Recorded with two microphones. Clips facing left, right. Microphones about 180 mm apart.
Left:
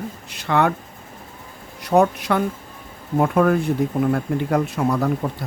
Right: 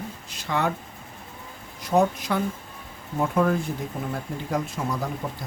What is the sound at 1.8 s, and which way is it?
Speech, 65° left (ahead or behind).